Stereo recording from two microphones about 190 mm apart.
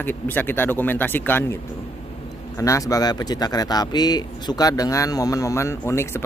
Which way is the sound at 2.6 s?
15° left (ahead or behind).